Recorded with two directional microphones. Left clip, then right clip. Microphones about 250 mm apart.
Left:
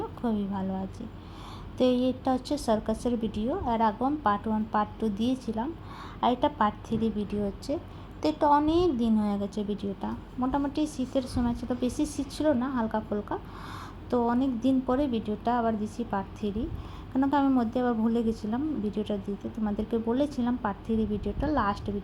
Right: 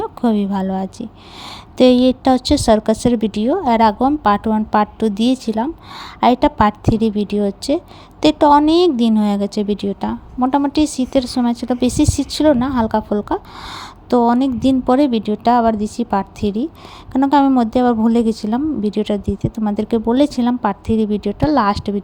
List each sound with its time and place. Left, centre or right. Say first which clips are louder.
0.0 s a woman's voice: right 13 dB; right